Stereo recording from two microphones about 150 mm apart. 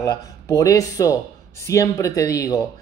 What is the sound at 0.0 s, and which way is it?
Speech, 20° left (ahead or behind).